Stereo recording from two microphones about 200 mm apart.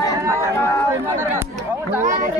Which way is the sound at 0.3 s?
15° left (ahead or behind).